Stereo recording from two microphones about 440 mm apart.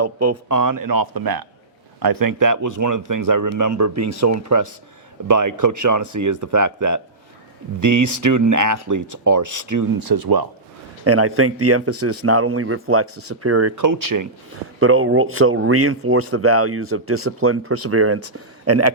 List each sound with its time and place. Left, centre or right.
0.0 s speech: right
11.0 s speech: right
14.8 s speech: right